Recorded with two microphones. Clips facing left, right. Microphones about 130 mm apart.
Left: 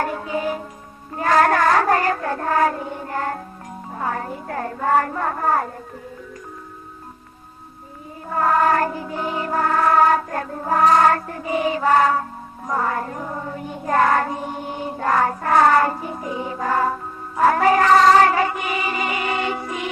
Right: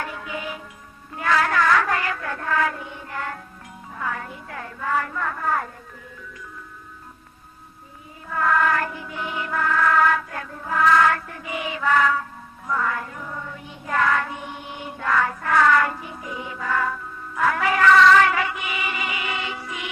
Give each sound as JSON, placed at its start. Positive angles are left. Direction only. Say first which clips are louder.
{"t": 0.0, "sound": "music", "louder": "left 8 dB", "side_deg": 40}
{"t": 8.3, "sound": "music", "louder": "left 4 dB", "side_deg": 35}